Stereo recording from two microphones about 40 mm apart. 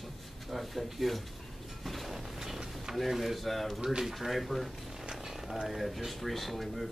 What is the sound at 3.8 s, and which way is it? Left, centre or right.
Speech, centre.